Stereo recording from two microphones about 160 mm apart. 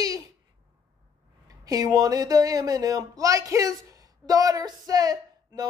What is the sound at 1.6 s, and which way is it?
Speech, 25° right (ahead or behind).